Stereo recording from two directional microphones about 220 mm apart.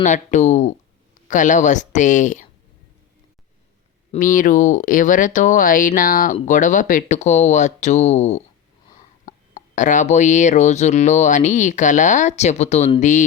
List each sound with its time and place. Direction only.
0.0 s speech: 35° left (ahead or behind)
4.1 s speech: 35° left (ahead or behind)